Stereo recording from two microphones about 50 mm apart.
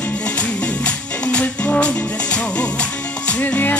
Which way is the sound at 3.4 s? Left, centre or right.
Left.